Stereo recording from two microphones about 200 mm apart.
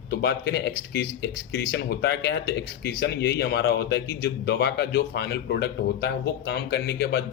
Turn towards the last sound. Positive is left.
turn(degrees=55)  # may be behind; listen again after turning